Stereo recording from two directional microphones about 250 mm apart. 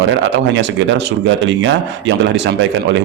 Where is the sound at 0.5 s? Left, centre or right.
Right.